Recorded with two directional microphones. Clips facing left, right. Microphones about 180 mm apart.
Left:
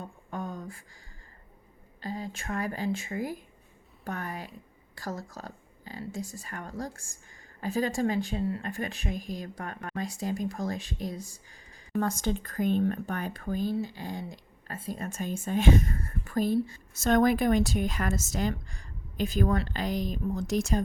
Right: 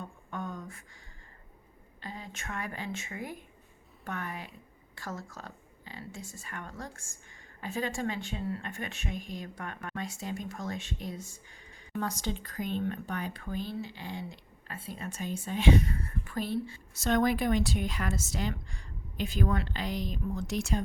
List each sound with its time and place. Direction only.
0.0 s a sound: 35° left (ahead or behind)
2.0 s a woman's voice: 40° left (ahead or behind)
11.9 s speech: 50° left (ahead or behind)